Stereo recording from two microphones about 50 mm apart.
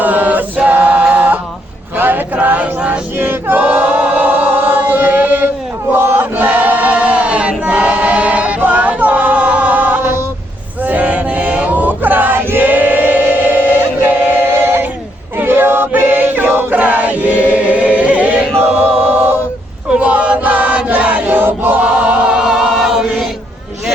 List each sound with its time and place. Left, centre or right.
0.0 s chant: right
0.7 s a sound: right
2.0 s male singing: right
3.2 s choir: right
5.9 s chant: right
6.3 s choir: right
15.4 s male singing: right
15.9 s choir: right
20.0 s chant: right
21.8 s chant: right